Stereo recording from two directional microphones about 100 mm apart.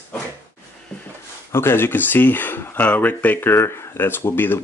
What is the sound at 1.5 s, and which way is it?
Speech, 25° left (ahead or behind).